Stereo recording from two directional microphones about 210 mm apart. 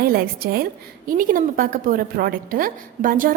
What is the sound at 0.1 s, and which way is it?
A woman's voice, 45° right (ahead or behind).